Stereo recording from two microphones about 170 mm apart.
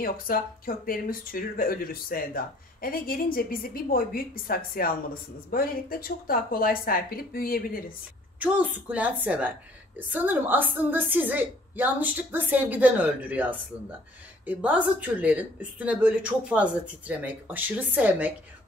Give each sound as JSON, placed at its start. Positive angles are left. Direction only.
{"t": 0.0, "sound": "speech", "side_deg": 60}
{"t": 8.4, "sound": "a woman's voice", "side_deg": -10}